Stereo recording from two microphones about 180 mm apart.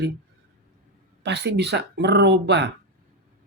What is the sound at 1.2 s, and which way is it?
Speech, 75° right (ahead or behind).